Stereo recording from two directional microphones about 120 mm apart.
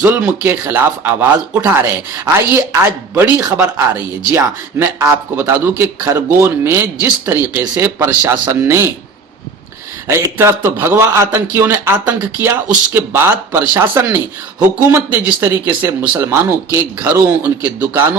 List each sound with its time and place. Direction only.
0.0 s speech: 15° right (ahead or behind)
3.2 s speech: 15° right (ahead or behind)
10.1 s speech: 20° right (ahead or behind)